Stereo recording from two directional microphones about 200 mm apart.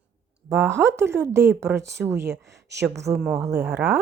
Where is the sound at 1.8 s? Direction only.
55° right (ahead or behind).